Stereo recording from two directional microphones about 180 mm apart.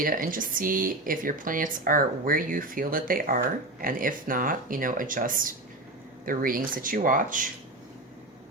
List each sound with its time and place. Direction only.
0.0 s speech: 50° right (ahead or behind)